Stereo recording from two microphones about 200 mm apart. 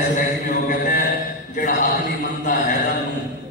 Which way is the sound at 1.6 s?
50° left (ahead or behind).